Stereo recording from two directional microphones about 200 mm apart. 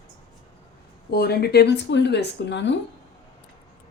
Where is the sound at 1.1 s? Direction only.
50° left (ahead or behind).